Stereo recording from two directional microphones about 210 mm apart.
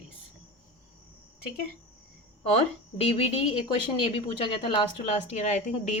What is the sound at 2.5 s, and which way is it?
Speech, 25° left (ahead or behind).